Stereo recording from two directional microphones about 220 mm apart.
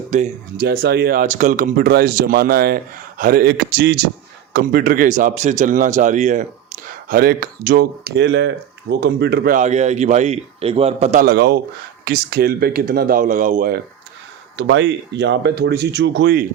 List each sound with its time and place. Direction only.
0.1 s speech: 40° right (ahead or behind)
14.5 s speech: 55° right (ahead or behind)